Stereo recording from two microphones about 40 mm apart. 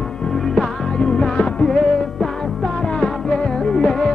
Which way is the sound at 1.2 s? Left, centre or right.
Centre.